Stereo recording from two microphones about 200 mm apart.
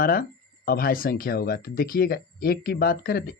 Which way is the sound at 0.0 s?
45° left (ahead or behind).